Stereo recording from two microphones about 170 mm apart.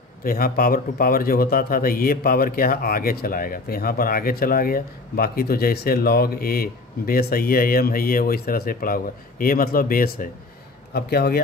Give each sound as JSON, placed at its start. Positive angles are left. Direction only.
{"t": 0.2, "sound": "a man's voice", "side_deg": 60}